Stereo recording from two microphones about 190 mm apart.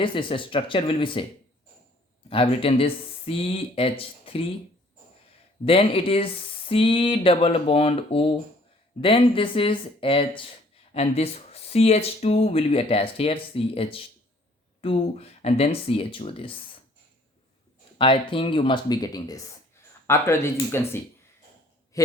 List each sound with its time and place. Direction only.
0.0 s speech: 25° left (ahead or behind)
2.3 s speech: 30° left (ahead or behind)
5.6 s speech: 30° left (ahead or behind)
17.9 s a man's voice: 25° left (ahead or behind)